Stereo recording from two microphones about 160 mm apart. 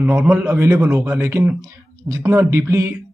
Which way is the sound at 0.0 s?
5° right (ahead or behind).